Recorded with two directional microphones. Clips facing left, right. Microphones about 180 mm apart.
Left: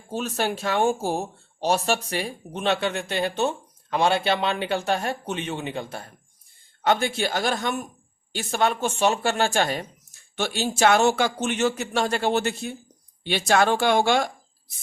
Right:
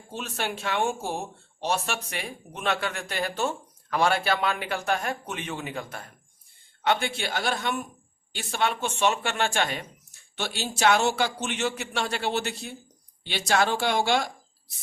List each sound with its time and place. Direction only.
0.1 s speech: 40° left (ahead or behind)
6.8 s a man's voice: 40° left (ahead or behind)